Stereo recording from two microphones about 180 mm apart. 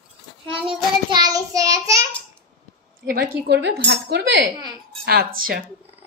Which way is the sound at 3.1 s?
60° right (ahead or behind).